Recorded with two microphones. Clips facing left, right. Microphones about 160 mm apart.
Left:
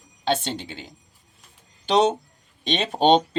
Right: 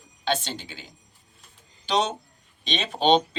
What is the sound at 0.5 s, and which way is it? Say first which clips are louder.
Speech: left 4 dB; 25° left (ahead or behind).